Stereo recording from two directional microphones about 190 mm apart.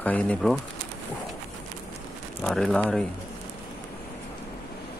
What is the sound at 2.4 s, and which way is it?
Speech, 5° left (ahead or behind).